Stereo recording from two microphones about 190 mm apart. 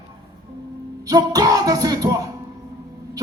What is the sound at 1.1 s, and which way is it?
Music, 20° right (ahead or behind).